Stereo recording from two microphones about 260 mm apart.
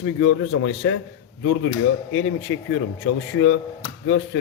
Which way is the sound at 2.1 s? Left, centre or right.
Left.